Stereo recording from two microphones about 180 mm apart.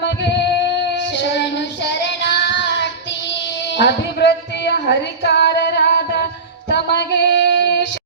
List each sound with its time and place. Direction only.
0.0 s music: 75° left (ahead or behind)
1.1 s child singing: 70° left (ahead or behind)
6.7 s a sound: 70° left (ahead or behind)